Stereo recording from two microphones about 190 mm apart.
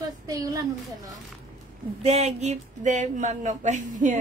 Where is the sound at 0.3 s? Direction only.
20° right (ahead or behind).